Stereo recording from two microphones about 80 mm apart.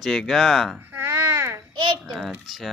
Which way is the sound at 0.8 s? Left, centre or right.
Right.